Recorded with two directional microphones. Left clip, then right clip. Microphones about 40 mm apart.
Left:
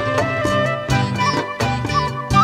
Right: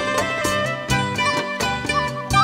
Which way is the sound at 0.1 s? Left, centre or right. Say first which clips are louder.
Left 3 dB; right.